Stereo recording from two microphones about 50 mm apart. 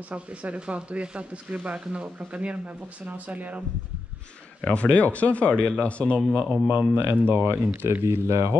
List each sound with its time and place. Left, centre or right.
0.1 s speech: right
4.6 s speech: left
6.5 s speech: right
7.2 s speech: right
8.0 s speech: right